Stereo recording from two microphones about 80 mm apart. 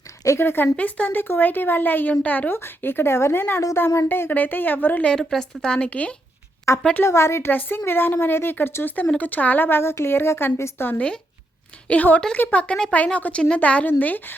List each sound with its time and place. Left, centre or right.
0.3 s speech: left
5.2 s a woman's voice: centre
6.9 s a woman's voice: left
10.9 s a woman's voice: centre